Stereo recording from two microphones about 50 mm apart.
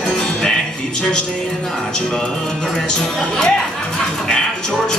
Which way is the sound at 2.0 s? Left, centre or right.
Centre.